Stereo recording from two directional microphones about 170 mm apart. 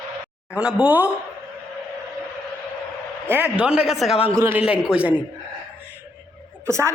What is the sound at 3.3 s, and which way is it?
A man's voice, 10° right (ahead or behind).